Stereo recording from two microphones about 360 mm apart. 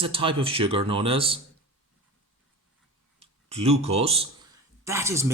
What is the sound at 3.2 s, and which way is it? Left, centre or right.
Speech, centre.